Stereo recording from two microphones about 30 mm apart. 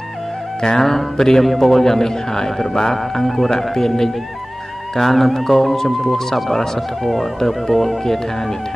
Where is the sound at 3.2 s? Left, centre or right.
Centre.